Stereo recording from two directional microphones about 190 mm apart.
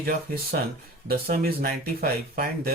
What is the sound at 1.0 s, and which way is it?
Speech, 55° right (ahead or behind).